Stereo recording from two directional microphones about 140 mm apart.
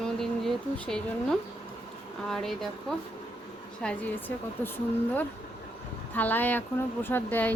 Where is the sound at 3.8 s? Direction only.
5° left (ahead or behind).